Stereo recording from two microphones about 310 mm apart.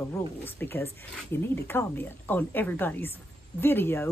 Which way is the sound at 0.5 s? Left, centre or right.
Centre.